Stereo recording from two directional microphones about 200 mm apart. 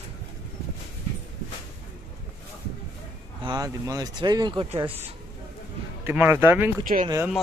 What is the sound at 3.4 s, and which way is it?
Speech, 20° right (ahead or behind).